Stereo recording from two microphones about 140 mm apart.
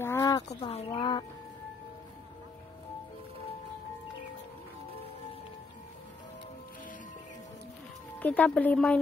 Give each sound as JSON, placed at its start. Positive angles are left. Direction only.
{"t": 0.0, "sound": "a sound", "side_deg": 20}
{"t": 0.5, "sound": "speech", "side_deg": 50}
{"t": 0.9, "sound": "speech", "side_deg": 35}
{"t": 8.2, "sound": "speech", "side_deg": 10}